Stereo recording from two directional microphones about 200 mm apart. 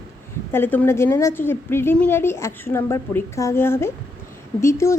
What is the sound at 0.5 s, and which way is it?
A woman's voice, 10° left (ahead or behind).